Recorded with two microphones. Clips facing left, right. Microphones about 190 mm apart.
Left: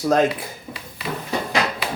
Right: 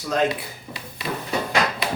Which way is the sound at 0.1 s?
45° left (ahead or behind).